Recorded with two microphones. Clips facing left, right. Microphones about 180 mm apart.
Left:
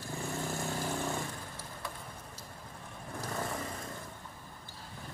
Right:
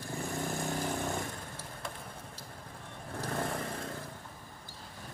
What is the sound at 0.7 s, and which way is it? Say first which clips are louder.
Vehicle: right 1 dB; 15° right (ahead or behind).